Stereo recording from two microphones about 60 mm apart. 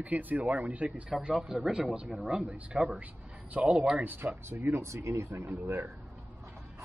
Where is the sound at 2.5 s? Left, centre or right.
Centre.